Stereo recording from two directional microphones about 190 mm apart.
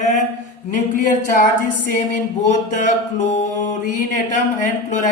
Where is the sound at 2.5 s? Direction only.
40° left (ahead or behind).